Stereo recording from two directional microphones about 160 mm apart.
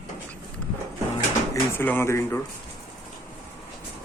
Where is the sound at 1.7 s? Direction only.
15° left (ahead or behind).